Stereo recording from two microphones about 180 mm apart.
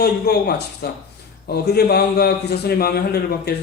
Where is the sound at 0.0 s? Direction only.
60° left (ahead or behind).